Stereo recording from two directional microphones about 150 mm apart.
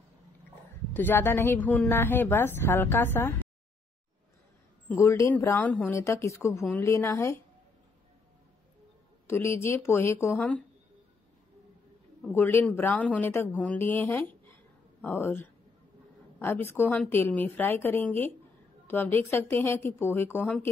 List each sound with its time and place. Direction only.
0.9 s a woman's voice: 15° left (ahead or behind)
4.8 s a woman's voice: 15° left (ahead or behind)
9.3 s a woman's voice: 15° left (ahead or behind)
12.3 s a woman's voice: 15° left (ahead or behind)